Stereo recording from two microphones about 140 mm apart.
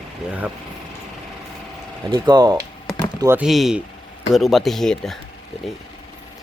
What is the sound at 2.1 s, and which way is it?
Speech, 30° right (ahead or behind).